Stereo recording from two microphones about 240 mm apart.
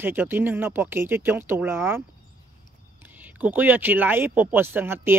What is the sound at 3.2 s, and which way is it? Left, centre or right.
Speech, centre.